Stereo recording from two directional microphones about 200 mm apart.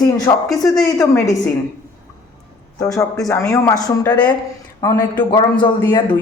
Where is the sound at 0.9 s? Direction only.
15° left (ahead or behind).